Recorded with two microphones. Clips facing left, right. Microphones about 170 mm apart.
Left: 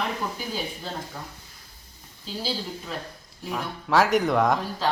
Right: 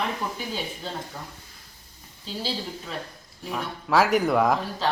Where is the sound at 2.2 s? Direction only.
Centre (ahead or behind).